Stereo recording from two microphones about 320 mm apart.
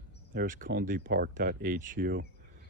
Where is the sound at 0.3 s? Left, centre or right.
Right.